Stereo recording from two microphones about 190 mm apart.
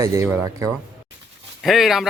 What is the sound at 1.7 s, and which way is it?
Speech, centre (ahead or behind).